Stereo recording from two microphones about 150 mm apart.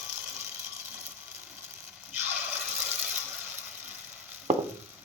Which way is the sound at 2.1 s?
15° right (ahead or behind).